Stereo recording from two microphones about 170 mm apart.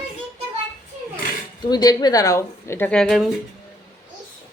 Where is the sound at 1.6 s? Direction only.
25° left (ahead or behind); by 3.3 s centre (ahead or behind).